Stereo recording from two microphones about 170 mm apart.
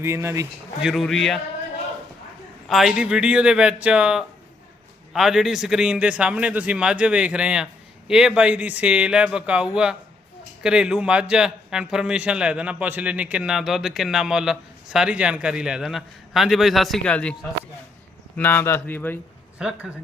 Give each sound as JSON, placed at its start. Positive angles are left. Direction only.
{"t": 0.0, "sound": "a man's voice", "side_deg": -15}
{"t": 0.8, "sound": "a man's voice", "side_deg": 0}
{"t": 2.6, "sound": "a man's voice", "side_deg": 0}
{"t": 18.3, "sound": "speech", "side_deg": 10}
{"t": 19.5, "sound": "a man's voice", "side_deg": -5}